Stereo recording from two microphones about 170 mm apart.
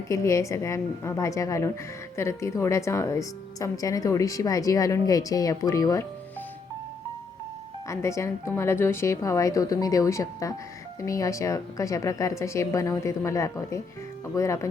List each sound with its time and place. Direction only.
0.1 s a woman's voice: 20° left (ahead or behind)
7.9 s a woman's voice: 15° left (ahead or behind)